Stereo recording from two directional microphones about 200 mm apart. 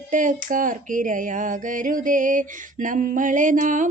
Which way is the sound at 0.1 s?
40° right (ahead or behind).